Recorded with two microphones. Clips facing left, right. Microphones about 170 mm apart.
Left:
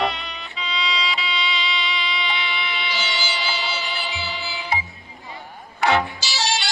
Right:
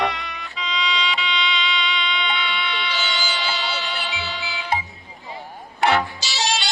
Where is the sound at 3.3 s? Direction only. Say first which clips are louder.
Right 1 dB; centre (ahead or behind).